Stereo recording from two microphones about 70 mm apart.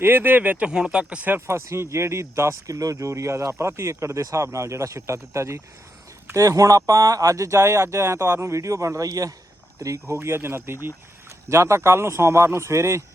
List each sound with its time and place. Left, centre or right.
0.0 s speech: right
0.7 s speech: centre
1.5 s speech: right
10.2 s speech: right